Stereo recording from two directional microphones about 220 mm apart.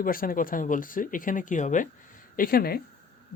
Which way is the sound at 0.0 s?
40° left (ahead or behind).